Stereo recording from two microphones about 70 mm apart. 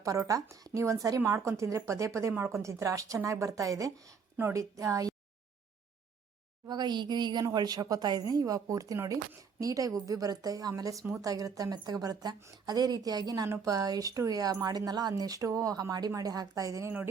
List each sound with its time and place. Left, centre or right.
0.0 s speech: right
6.7 s a woman's voice: right
7.5 s a woman's voice: right
15.1 s speech: right